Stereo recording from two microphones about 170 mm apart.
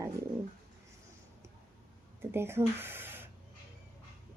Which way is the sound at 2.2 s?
15° right (ahead or behind).